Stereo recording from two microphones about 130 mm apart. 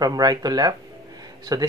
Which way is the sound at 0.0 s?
30° right (ahead or behind).